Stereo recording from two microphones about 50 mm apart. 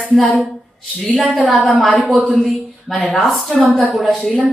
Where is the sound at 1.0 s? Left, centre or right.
Centre.